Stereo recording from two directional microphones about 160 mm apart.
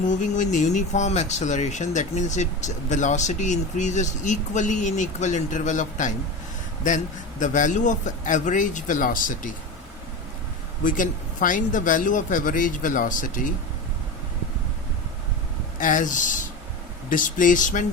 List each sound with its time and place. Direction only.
0.0 s speech: 50° left (ahead or behind)
10.8 s speech: 55° left (ahead or behind)
15.8 s speech: 55° left (ahead or behind)